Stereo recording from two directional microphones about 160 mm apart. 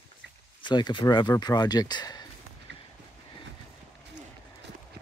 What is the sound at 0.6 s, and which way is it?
Speech, 30° left (ahead or behind).